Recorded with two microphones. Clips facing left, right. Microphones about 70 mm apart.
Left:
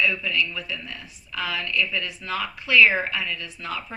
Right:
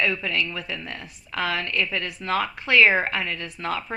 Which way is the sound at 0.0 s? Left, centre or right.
Right.